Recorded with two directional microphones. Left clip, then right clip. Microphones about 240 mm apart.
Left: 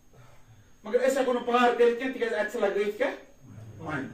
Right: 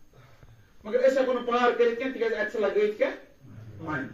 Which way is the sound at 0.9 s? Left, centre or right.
Left.